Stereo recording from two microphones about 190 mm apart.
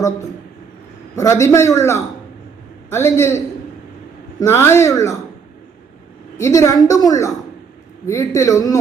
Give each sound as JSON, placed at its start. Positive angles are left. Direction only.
{"t": 1.1, "sound": "a woman's voice", "side_deg": 15}
{"t": 6.4, "sound": "a woman's voice", "side_deg": 15}